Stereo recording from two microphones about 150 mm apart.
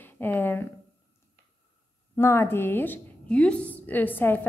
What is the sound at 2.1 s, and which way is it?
A woman's voice, 15° left (ahead or behind).